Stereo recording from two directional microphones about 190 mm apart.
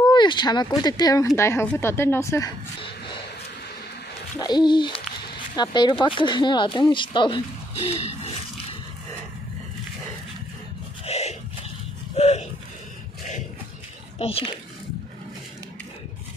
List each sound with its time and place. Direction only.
0.0 s speech: 25° left (ahead or behind)
4.4 s speech: 20° left (ahead or behind)
11.1 s a sound: 35° left (ahead or behind)
14.1 s speech: 30° left (ahead or behind)